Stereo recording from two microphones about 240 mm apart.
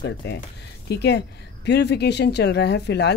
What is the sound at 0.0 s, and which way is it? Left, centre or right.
Speech, left.